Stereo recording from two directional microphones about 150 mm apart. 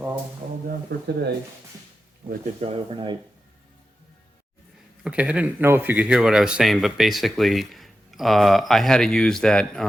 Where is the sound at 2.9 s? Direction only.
30° right (ahead or behind).